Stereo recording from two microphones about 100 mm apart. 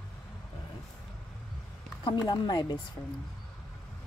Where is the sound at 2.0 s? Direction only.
45° left (ahead or behind).